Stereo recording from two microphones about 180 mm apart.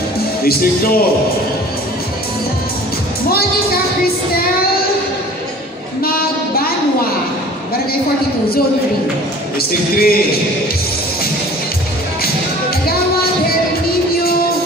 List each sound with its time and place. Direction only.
0.5 s music: 55° left (ahead or behind)
3.3 s music: 55° left (ahead or behind)
6.0 s a sound: 55° left (ahead or behind)
9.6 s music: 55° left (ahead or behind)
12.8 s music: 60° left (ahead or behind)